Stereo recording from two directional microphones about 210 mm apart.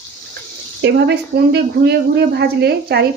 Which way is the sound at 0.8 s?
55° right (ahead or behind).